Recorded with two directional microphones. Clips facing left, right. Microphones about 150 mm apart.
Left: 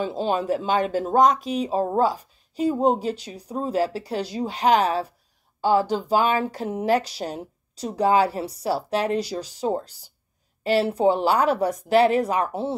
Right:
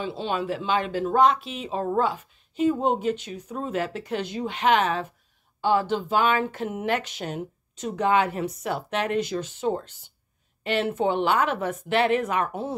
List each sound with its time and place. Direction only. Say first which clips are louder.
0.0 s speech: left 4 dB; 40° left (ahead or behind)